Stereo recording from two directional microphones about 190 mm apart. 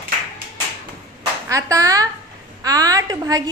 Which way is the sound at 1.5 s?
15° right (ahead or behind).